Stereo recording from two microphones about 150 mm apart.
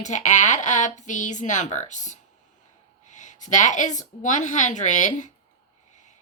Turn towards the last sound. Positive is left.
turn(degrees=55)  # may be behind; listen again after turning